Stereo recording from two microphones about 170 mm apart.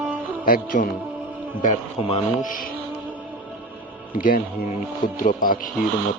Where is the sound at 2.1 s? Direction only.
50° left (ahead or behind).